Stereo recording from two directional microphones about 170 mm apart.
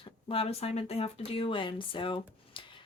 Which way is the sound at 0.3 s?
35° left (ahead or behind).